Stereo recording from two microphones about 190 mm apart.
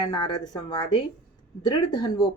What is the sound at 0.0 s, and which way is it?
Speech, 20° left (ahead or behind).